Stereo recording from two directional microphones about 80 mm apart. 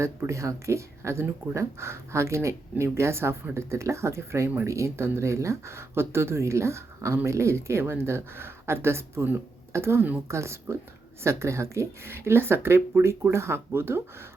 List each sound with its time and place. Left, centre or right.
0.0 s speech: right